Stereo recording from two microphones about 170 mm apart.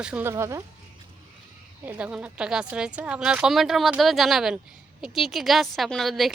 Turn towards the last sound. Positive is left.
turn(degrees=0)  # may be behind; listen again after turning